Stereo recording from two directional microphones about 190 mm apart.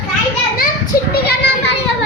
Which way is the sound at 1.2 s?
65° left (ahead or behind).